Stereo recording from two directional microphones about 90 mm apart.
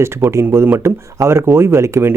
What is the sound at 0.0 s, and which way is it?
Speech, 30° right (ahead or behind).